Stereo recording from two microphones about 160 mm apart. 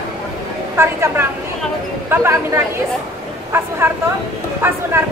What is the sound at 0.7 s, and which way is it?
Speech, 15° right (ahead or behind).